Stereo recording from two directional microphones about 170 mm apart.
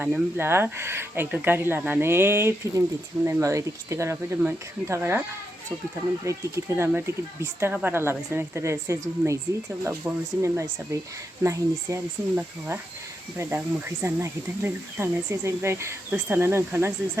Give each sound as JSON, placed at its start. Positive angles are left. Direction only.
{"t": 0.0, "sound": "speech", "side_deg": -10}
{"t": 6.2, "sound": "speech", "side_deg": -15}